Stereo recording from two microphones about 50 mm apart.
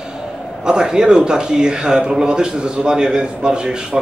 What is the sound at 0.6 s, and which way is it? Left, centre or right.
Speech, centre.